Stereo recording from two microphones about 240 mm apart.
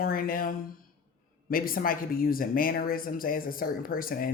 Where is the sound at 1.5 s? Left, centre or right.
Left.